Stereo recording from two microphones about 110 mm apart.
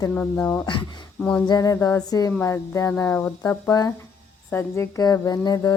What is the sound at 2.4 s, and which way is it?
Speech, 30° left (ahead or behind).